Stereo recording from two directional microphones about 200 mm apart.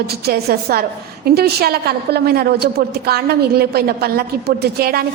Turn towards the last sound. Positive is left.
turn(degrees=-50)  # may be behind; listen again after turning